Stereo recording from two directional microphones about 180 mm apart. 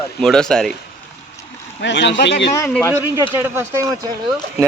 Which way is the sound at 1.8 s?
80° left.